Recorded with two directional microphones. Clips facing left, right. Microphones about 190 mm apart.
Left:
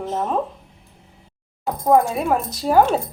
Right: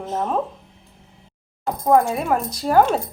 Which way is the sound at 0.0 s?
Centre (ahead or behind).